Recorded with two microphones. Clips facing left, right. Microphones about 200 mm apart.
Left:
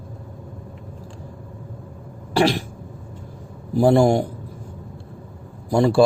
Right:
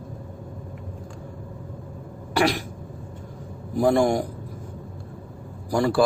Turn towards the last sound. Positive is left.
turn(degrees=25)  # may be behind; listen again after turning